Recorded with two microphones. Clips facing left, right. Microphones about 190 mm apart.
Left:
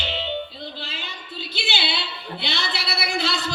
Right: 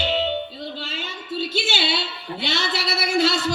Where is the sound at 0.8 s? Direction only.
45° right (ahead or behind).